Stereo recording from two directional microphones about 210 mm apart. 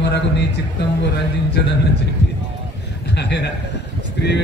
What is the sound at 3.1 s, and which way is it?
A man's voice, 55° left (ahead or behind).